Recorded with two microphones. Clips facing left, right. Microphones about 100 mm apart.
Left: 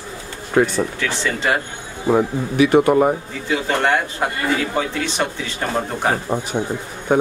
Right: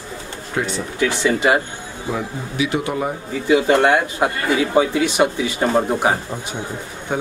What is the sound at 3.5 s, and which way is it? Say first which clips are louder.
Speech: right 4 dB; 15° right (ahead or behind).